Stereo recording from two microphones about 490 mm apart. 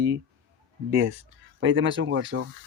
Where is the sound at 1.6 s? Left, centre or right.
Right.